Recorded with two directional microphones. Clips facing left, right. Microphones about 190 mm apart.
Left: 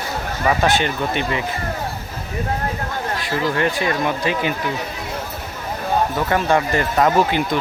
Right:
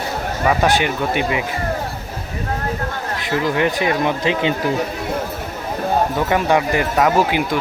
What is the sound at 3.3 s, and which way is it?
Speech, 15° right (ahead or behind).